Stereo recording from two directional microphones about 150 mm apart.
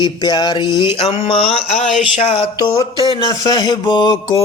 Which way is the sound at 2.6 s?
30° left (ahead or behind).